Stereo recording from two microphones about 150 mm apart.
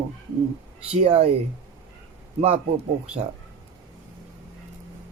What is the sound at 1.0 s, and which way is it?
Speech, 45° right (ahead or behind).